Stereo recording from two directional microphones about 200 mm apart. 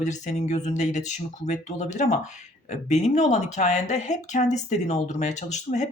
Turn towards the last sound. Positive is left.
turn(degrees=35)  # may be behind; listen again after turning